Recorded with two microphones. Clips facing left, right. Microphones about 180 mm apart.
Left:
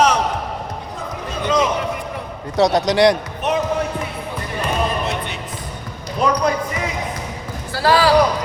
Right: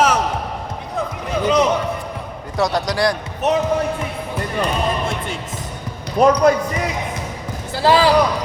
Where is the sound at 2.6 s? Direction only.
20° left (ahead or behind).